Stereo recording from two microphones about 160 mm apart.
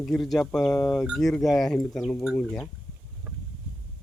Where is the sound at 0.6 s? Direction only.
20° left (ahead or behind).